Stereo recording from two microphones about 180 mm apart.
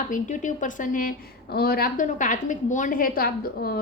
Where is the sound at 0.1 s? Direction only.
45° left (ahead or behind).